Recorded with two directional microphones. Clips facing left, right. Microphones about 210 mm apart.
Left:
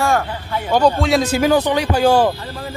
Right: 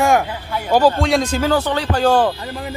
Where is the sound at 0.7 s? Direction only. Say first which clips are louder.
Even; 5° right (ahead or behind).